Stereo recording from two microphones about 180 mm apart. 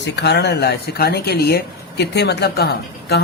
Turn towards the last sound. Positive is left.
turn(degrees=65)  # may be behind; listen again after turning